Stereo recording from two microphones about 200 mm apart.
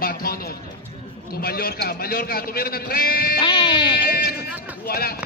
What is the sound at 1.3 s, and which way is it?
A man's voice, 50° left (ahead or behind).